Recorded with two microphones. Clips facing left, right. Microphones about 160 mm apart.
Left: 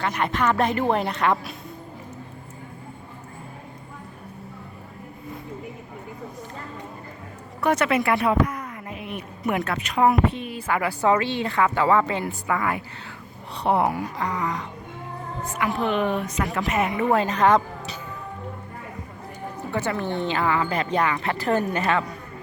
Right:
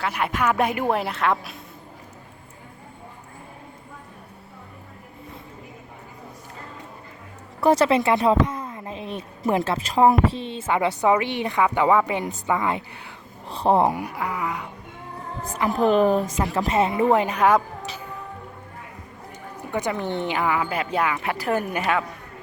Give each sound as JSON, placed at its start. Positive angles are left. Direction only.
{"t": 0.0, "sound": "speech", "side_deg": -5}
{"t": 7.6, "sound": "speech", "side_deg": -30}
{"t": 13.9, "sound": "speech", "side_deg": -10}
{"t": 15.5, "sound": "speech", "side_deg": -40}
{"t": 17.2, "sound": "speech", "side_deg": -10}
{"t": 19.7, "sound": "speech", "side_deg": -15}